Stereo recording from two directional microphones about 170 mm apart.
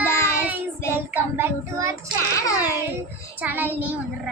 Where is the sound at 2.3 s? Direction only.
20° left (ahead or behind).